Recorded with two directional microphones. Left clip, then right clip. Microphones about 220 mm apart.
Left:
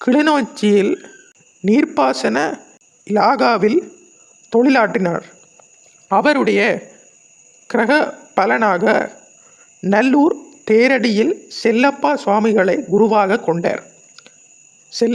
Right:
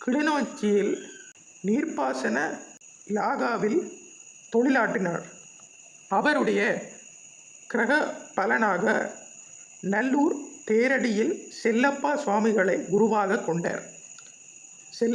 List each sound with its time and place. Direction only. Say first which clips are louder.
0.0 s speech: left 11 dB; 45° left (ahead or behind)
6.1 s speech: left 9 dB; 35° left (ahead or behind)
14.8 s cricket: left 9 dB; 35° left (ahead or behind)